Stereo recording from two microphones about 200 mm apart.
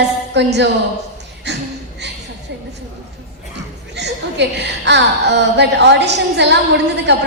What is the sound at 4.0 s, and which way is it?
A woman's voice, 60° right (ahead or behind).